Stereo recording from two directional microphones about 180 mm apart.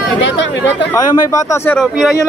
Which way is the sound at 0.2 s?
80° left.